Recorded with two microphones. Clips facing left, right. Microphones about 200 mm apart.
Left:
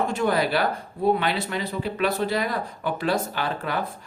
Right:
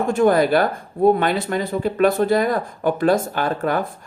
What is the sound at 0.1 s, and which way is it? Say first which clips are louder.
Speech: right 7 dB; 50° right (ahead or behind).